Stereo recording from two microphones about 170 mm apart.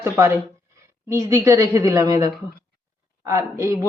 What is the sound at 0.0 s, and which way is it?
A woman's voice, 15° right (ahead or behind).